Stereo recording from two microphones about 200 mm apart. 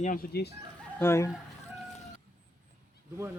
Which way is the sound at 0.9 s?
15° left (ahead or behind).